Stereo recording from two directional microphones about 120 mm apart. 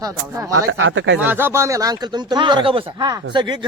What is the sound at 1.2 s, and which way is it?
Speech, 15° right (ahead or behind).